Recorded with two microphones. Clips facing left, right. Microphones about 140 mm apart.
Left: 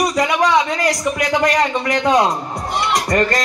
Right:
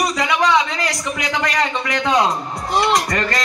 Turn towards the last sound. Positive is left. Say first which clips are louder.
# left 5 dB
turn(degrees=40)  # may be behind; listen again after turning